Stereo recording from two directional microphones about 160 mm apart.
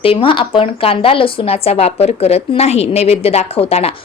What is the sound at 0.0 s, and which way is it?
Speech, 35° left (ahead or behind).